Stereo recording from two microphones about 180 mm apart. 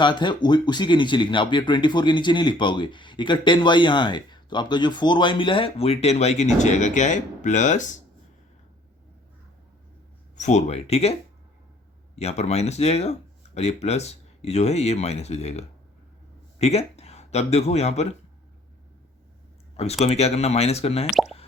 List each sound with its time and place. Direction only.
0.0 s speech: 25° left (ahead or behind); by 7.9 s 40° left (ahead or behind)
10.3 s speech: 40° left (ahead or behind)
19.7 s speech: 35° left (ahead or behind)
21.1 s speech: centre (ahead or behind)